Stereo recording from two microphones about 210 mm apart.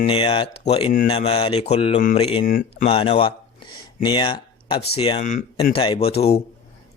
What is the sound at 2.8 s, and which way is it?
Speech, 25° left (ahead or behind).